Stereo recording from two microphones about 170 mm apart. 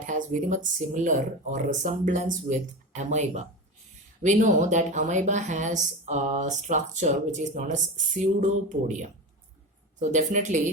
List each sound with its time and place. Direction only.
0.0 s speech: 45° right (ahead or behind)
10.0 s speech: 45° right (ahead or behind)